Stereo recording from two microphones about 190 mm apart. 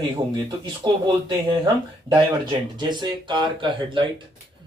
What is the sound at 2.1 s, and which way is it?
Speech, 25° right (ahead or behind).